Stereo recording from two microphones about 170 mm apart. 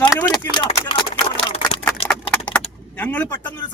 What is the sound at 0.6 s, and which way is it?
Speech, 30° left (ahead or behind).